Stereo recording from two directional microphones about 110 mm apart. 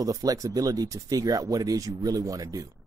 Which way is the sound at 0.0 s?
35° right (ahead or behind).